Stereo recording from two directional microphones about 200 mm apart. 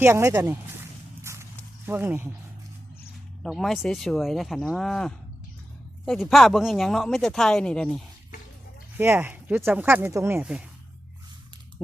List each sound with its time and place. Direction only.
0.0 s speech: 15° right (ahead or behind)
1.2 s walk: 15° right (ahead or behind)
1.9 s speech: 10° right (ahead or behind)
3.4 s speech: centre (ahead or behind)
9.0 s speech: 10° right (ahead or behind)